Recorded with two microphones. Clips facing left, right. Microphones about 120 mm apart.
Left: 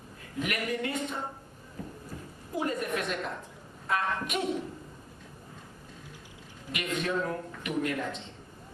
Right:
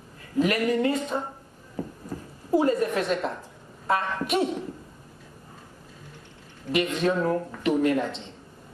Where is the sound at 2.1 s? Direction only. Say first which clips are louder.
Right 9 dB; 35° right (ahead or behind).